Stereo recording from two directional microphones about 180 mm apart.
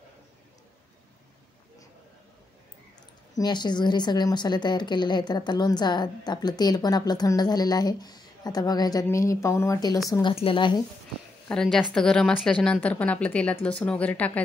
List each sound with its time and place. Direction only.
3.3 s a woman's voice: 25° left (ahead or behind)
10.3 s a woman's voice: 30° left (ahead or behind)
11.4 s a woman's voice: 5° left (ahead or behind)